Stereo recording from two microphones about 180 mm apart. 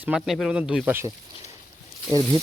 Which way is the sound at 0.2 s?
Centre (ahead or behind).